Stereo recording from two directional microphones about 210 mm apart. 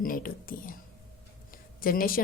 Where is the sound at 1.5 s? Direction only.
45° left (ahead or behind).